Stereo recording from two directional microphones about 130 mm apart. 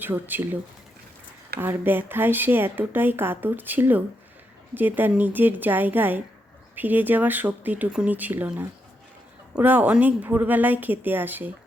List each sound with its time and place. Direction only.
0.0 s speech: 15° right (ahead or behind)